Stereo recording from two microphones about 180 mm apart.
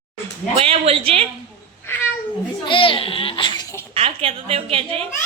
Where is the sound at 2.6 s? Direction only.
30° left (ahead or behind).